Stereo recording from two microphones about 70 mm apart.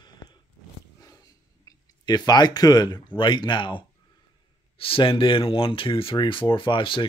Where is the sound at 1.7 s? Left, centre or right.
Left.